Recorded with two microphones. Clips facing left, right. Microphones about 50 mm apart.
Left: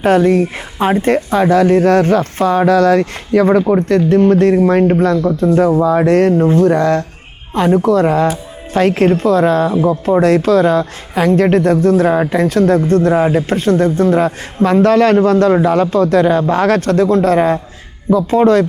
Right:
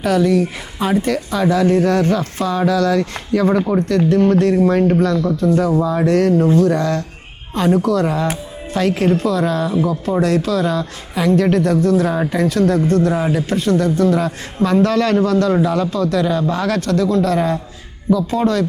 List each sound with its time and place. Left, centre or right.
0.0 s a man's voice: left